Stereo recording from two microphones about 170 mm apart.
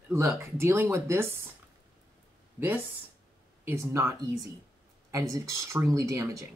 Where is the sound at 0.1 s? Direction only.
15° right (ahead or behind).